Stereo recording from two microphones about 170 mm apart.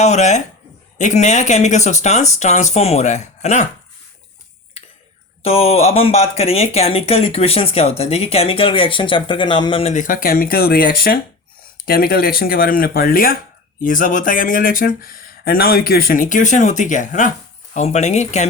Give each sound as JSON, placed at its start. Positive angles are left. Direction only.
{"t": 0.0, "sound": "speech", "side_deg": 40}
{"t": 5.4, "sound": "speech", "side_deg": 35}
{"t": 9.9, "sound": "speech", "side_deg": 50}